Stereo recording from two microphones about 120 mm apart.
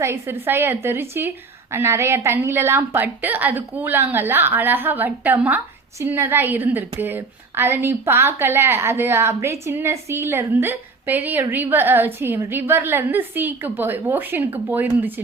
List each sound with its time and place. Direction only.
0.0 s a woman's voice: 20° right (ahead or behind)